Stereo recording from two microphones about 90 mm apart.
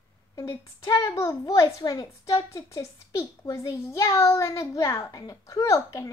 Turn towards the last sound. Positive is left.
turn(degrees=35)  # may be behind; listen again after turning